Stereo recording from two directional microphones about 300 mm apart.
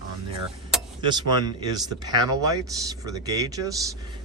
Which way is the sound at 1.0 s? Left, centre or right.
Centre.